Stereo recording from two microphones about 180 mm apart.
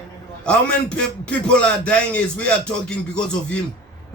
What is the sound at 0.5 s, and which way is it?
A man's voice, 5° left (ahead or behind).